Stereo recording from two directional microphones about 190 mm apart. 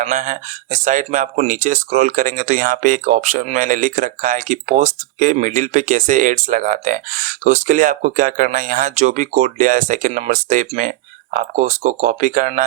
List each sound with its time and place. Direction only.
0.0 s speech: 40° right (ahead or behind)